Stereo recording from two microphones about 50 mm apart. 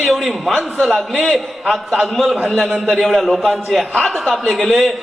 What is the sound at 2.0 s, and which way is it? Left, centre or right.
A man's voice, centre.